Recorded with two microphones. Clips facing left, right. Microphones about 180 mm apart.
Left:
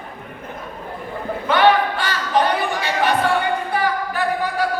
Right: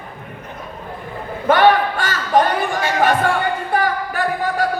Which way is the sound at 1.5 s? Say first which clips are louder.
Right 2 dB; 45° right (ahead or behind).